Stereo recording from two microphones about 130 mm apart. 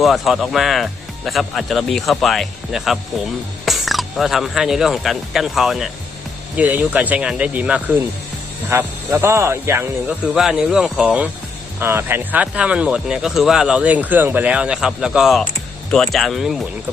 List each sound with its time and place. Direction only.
0.0 s speech: centre (ahead or behind)
8.7 s speech: 20° right (ahead or behind)
10.1 s speech: 5° right (ahead or behind)